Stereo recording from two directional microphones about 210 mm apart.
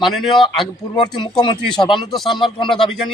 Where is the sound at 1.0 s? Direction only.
20° left (ahead or behind).